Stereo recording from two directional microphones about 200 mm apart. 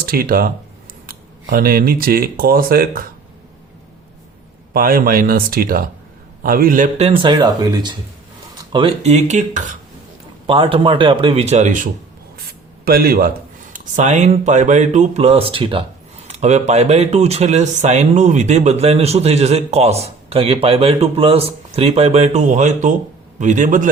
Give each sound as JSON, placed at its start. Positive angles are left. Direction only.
{"t": 0.0, "sound": "speech", "side_deg": -45}
{"t": 4.7, "sound": "speech", "side_deg": -45}
{"t": 10.4, "sound": "speech", "side_deg": -25}
{"t": 13.7, "sound": "speech", "side_deg": -40}